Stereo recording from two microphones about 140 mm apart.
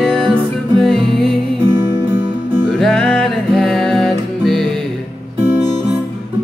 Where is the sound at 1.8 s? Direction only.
25° right (ahead or behind).